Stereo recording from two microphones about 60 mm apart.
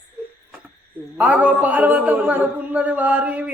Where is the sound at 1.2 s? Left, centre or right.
Right.